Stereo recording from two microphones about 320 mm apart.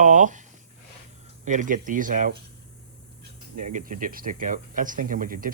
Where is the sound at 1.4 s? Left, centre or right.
Right.